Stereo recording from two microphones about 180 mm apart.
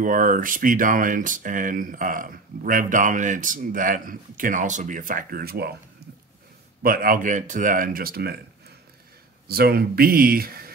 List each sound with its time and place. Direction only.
0.0 s speech: 50° right (ahead or behind)
6.8 s speech: 55° right (ahead or behind)
9.5 s speech: 60° right (ahead or behind)